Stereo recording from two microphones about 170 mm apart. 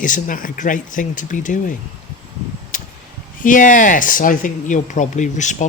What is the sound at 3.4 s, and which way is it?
Speech, 50° left (ahead or behind).